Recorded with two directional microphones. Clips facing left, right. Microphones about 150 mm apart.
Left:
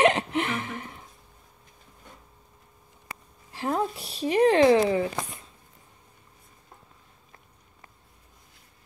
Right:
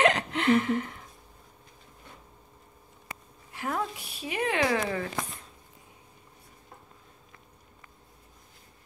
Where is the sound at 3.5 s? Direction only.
30° left (ahead or behind).